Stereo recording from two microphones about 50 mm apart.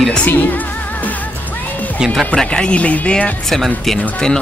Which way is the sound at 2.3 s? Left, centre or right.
Centre.